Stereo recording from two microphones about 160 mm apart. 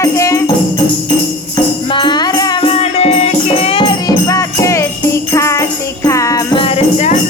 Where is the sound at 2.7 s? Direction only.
40° left (ahead or behind); by 6.4 s 20° left (ahead or behind).